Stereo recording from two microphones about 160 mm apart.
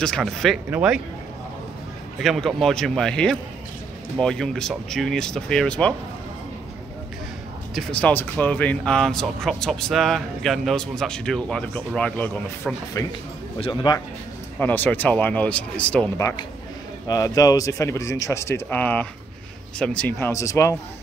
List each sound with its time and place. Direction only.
0.0 s speech: 5° left (ahead or behind)
2.2 s speech: centre (ahead or behind)
7.7 s speech: 10° left (ahead or behind)
13.0 s speech: 20° left (ahead or behind)
13.6 s speech: 30° left (ahead or behind)
14.6 s speech: 10° left (ahead or behind)
17.1 s speech: 20° left (ahead or behind)